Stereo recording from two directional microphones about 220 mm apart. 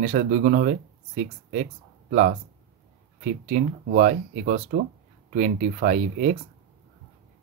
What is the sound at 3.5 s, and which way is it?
Speech, 40° right (ahead or behind).